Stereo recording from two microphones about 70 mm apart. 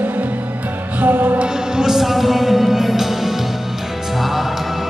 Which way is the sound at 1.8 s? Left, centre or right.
Centre.